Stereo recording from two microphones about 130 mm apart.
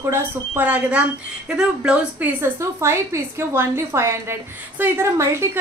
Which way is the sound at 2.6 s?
20° right (ahead or behind).